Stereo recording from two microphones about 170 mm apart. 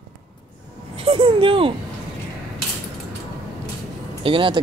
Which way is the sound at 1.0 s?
30° right (ahead or behind).